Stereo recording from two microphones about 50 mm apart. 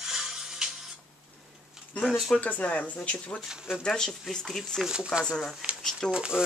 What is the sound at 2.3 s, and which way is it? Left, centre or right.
Speech, left.